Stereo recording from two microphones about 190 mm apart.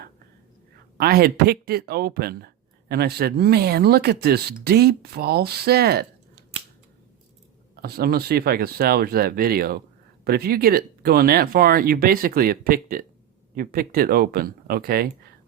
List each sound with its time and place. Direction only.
0.9 s speech: 55° right (ahead or behind)
7.8 s speech: 55° right (ahead or behind)